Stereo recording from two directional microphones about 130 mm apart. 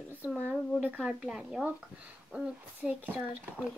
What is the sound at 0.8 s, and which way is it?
Speech, 10° right (ahead or behind).